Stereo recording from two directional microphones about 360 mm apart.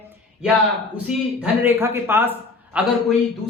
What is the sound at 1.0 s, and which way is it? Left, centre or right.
Speech, centre.